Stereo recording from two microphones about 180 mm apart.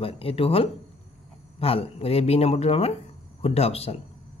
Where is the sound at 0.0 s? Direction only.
30° left (ahead or behind).